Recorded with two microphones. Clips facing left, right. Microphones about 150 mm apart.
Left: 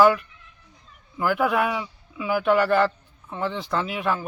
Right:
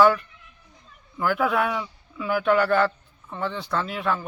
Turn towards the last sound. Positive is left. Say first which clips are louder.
# left 1 dB
turn(degrees=5)  # may be behind; listen again after turning